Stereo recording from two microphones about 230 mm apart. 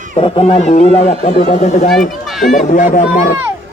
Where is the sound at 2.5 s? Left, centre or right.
Left.